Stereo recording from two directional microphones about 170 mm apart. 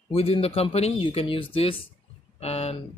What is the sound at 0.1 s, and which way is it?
Speech, 35° left (ahead or behind).